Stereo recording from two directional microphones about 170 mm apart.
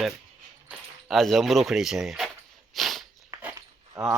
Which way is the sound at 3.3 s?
20° right (ahead or behind).